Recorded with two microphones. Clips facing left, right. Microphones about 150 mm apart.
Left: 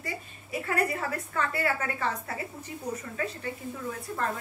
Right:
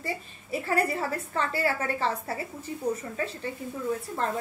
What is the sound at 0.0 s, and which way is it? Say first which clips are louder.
A woman's voice: right 3 dB; 30° right (ahead or behind).